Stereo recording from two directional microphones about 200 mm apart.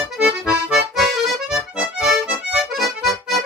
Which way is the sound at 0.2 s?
Centre (ahead or behind).